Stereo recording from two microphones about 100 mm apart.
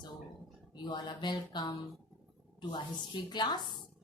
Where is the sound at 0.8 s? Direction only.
45° left (ahead or behind).